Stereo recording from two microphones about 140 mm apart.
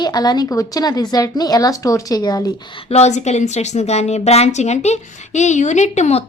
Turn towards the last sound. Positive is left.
turn(degrees=55)  # may be behind; listen again after turning